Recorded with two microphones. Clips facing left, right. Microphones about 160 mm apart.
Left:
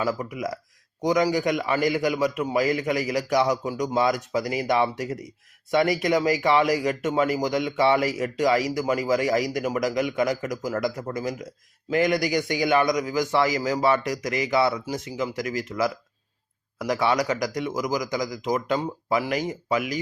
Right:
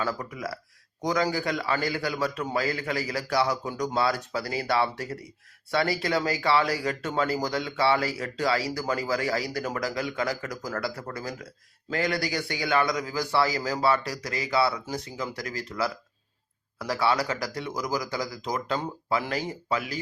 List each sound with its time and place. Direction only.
0.0 s speech: 15° left (ahead or behind)